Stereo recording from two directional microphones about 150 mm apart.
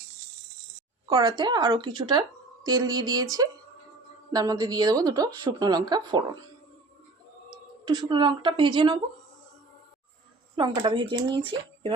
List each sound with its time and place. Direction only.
1.0 s a woman's voice: 25° right (ahead or behind)
7.9 s speech: 30° right (ahead or behind)
10.5 s speech: 35° right (ahead or behind)